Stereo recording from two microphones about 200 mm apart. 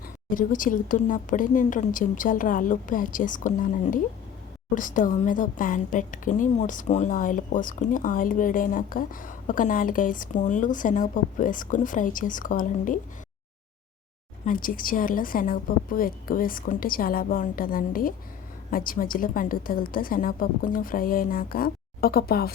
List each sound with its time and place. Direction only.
0.3 s a woman's voice: 40° left (ahead or behind)
14.4 s a woman's voice: 45° left (ahead or behind)